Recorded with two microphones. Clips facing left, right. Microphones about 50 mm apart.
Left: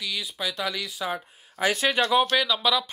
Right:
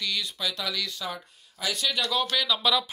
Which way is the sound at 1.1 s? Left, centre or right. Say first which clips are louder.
Left 7 dB; left.